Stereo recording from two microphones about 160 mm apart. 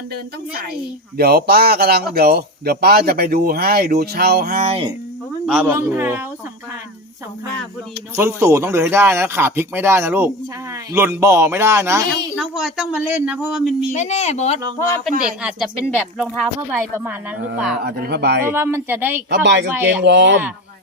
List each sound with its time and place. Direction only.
0.7 s speech: 75° right (ahead or behind)
4.6 s speech: 35° right (ahead or behind)
5.5 s speech: 5° right (ahead or behind)
8.1 s speech: 15° right (ahead or behind)
12.4 s speech: centre (ahead or behind)
13.9 s speech: 45° left (ahead or behind)
15.4 s speech: 5° right (ahead or behind)
16.6 s speech: 15° right (ahead or behind)
17.8 s speech: 80° right
18.4 s speech: 15° right (ahead or behind)
19.3 s speech: 90° right
19.7 s speech: 10° right (ahead or behind)
20.0 s speech: 90° right